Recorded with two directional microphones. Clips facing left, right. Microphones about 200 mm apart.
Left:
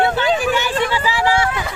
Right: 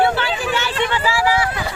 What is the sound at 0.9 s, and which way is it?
Speech, 15° left (ahead or behind).